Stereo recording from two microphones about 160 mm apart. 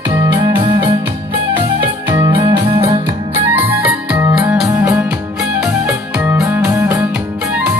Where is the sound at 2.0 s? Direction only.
30° right (ahead or behind).